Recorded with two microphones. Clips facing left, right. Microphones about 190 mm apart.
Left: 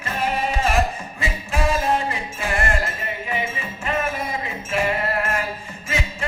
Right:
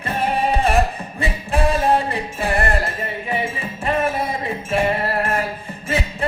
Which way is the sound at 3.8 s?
35° right (ahead or behind).